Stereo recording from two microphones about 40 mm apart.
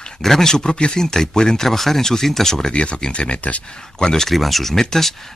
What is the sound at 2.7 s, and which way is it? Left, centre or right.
Speech, left.